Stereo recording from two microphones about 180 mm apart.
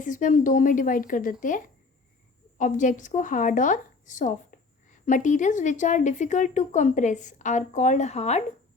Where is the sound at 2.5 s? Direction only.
45° left (ahead or behind).